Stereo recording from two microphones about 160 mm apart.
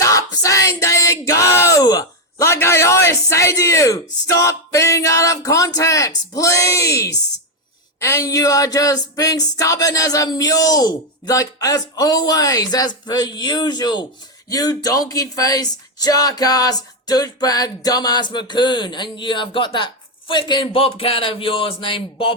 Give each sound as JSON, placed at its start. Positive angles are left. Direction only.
{"t": 0.0, "sound": "speech", "side_deg": 20}